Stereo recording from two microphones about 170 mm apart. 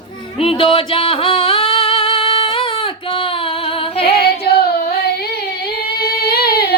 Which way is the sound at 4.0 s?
70° left (ahead or behind).